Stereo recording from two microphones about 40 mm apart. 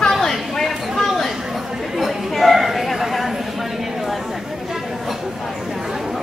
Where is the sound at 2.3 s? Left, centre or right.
Centre.